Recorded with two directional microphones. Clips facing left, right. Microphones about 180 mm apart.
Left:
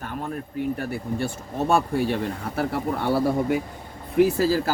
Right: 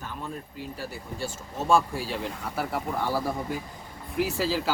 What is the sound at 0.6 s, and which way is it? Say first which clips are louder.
Speech: left 10 dB; 60° left (ahead or behind).